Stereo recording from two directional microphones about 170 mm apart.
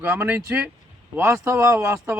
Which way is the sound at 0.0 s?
10° right (ahead or behind).